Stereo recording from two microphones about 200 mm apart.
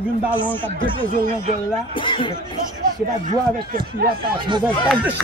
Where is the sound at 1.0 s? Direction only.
40° right (ahead or behind).